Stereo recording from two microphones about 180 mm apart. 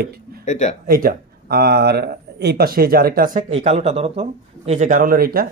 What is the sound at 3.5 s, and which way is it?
Speech, 35° right (ahead or behind).